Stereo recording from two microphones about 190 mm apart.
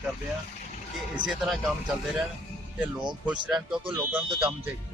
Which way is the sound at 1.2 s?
Centre (ahead or behind).